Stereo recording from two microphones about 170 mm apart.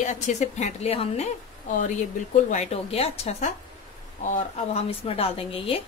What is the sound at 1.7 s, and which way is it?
Speech, 45° left (ahead or behind).